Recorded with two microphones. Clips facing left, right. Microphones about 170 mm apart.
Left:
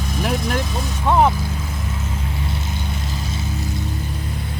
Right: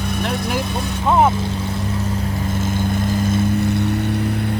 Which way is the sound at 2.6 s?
50° right (ahead or behind).